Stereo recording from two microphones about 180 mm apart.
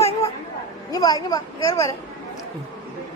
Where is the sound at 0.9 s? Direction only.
20° left (ahead or behind).